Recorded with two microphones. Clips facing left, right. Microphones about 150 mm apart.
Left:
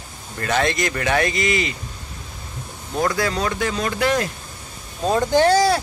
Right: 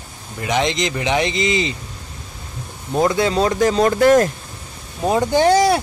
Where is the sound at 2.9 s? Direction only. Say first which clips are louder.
Right 5 dB; 25° right (ahead or behind).